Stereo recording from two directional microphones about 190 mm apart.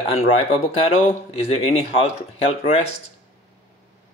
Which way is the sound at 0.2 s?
35° left (ahead or behind).